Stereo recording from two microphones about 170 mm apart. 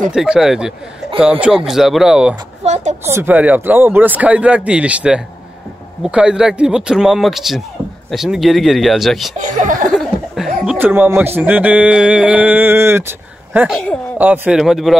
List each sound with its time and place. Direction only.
0.1 s speech: centre (ahead or behind)
2.6 s speech: 45° right (ahead or behind)
3.1 s speech: 15° right (ahead or behind)
9.4 s speech: 50° right (ahead or behind)
9.8 s speech: centre (ahead or behind)